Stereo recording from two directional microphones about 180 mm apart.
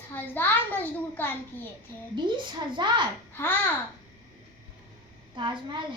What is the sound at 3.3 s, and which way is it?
Speech, 10° left (ahead or behind).